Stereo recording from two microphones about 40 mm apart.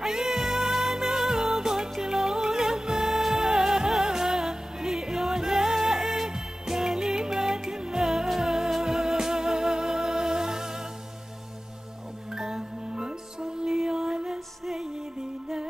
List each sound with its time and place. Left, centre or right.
0.0 s music: centre
12.3 s music: centre